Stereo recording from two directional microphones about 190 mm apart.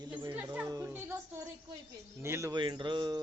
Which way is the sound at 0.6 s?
20° right (ahead or behind).